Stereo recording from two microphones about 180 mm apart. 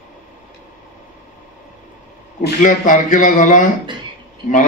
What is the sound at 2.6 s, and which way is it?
A man's voice, 45° left (ahead or behind).